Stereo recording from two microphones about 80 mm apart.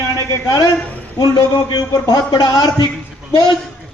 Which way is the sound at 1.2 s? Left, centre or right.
Left.